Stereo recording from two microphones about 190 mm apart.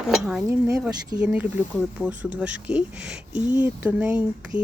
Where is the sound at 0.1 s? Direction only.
5° right (ahead or behind).